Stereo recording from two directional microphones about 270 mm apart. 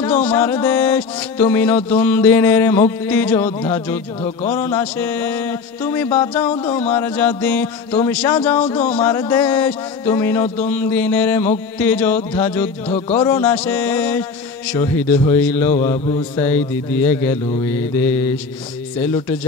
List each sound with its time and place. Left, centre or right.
0.0 s music: centre
12.8 s speech: left
13.3 s music: centre